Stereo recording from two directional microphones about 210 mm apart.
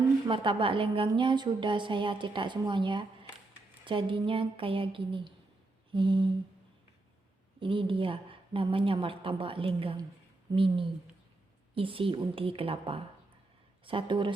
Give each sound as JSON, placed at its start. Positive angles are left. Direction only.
{"t": 0.3, "sound": "speech", "side_deg": -25}
{"t": 7.6, "sound": "speech", "side_deg": -25}